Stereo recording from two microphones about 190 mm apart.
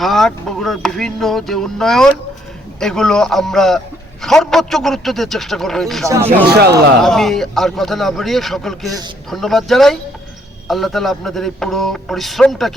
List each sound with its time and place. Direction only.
0.0 s speech: centre (ahead or behind)
6.5 s a man's voice: 60° right (ahead or behind)
7.0 s speech: centre (ahead or behind)